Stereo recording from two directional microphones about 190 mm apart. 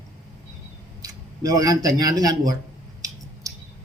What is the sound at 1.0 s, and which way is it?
Speech, 20° right (ahead or behind).